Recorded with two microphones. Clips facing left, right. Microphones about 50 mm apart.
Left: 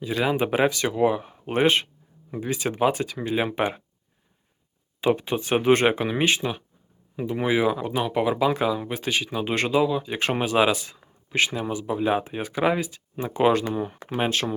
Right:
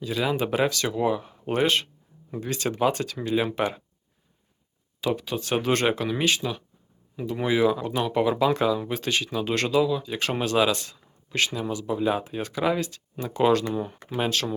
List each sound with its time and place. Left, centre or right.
0.3 s speech: left
4.9 s speech: left